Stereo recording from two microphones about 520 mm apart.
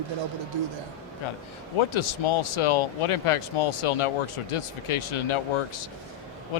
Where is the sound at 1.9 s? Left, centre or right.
Left.